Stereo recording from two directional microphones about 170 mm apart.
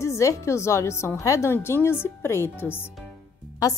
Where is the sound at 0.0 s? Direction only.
15° left (ahead or behind).